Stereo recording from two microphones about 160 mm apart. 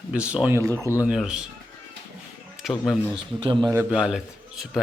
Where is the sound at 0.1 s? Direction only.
5° right (ahead or behind).